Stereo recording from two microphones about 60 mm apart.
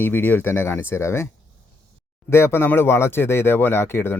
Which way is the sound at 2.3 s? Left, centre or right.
Left.